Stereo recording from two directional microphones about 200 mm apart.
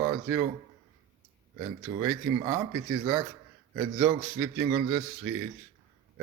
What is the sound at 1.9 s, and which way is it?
Speech, 15° right (ahead or behind).